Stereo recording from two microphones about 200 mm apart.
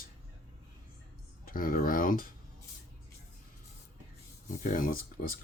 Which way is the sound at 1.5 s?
45° left (ahead or behind).